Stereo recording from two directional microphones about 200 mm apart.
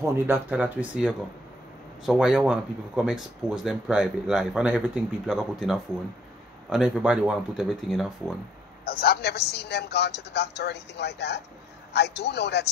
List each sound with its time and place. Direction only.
0.0 s speech: 10° right (ahead or behind)
8.8 s a man's voice: 50° left (ahead or behind)